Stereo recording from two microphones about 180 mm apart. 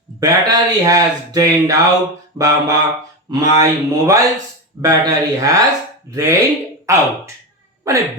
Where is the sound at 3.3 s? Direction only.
20° right (ahead or behind).